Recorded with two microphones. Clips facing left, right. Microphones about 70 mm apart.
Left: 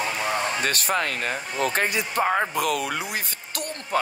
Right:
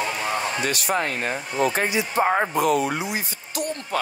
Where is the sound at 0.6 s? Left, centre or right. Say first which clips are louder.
Right 1 dB; left.